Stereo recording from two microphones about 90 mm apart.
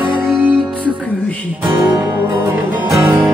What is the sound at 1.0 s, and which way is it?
Music, 15° left (ahead or behind).